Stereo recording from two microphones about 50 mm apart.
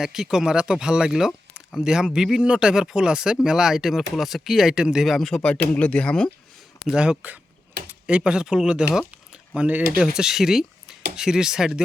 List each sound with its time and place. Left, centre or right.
0.0 s speech: centre
5.0 s speech: centre
5.7 s speech: left
6.8 s speech: centre
9.6 s speech: right
10.0 s speech: centre